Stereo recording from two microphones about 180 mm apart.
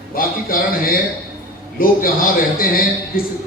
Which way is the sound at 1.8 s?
50° left (ahead or behind).